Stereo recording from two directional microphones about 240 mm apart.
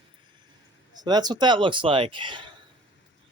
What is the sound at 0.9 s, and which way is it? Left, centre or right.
Speech, centre.